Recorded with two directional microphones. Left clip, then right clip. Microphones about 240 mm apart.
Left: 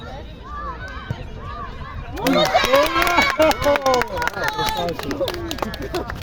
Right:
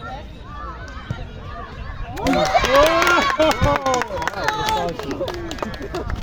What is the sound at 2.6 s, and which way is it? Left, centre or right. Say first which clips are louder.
Run: right 2 dB; left.